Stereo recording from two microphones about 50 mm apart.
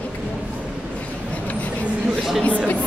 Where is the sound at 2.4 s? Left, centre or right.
Left.